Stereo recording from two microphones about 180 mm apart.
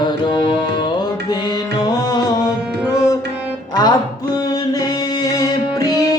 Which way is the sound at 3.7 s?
20° left (ahead or behind).